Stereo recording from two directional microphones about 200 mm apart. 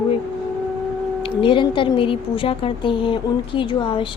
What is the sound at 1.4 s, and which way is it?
A woman's voice, 25° left (ahead or behind).